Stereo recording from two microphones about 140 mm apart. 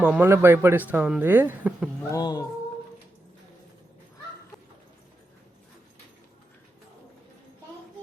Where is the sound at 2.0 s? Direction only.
25° left (ahead or behind).